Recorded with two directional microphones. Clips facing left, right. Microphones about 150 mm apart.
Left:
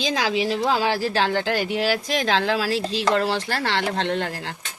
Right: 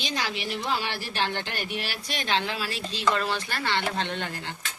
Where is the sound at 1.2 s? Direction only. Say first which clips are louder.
Left 8 dB; 90° left.